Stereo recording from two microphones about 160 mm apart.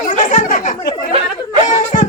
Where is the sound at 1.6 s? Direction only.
50° left (ahead or behind).